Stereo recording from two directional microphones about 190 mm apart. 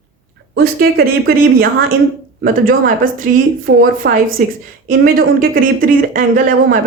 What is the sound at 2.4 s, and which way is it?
Speech, 45° right (ahead or behind).